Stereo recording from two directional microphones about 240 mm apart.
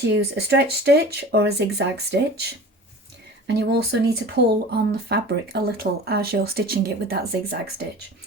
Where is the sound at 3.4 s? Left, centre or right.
Right.